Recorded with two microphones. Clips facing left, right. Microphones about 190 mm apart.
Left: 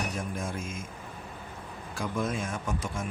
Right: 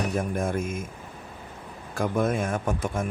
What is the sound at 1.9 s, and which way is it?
Speech, 55° right (ahead or behind).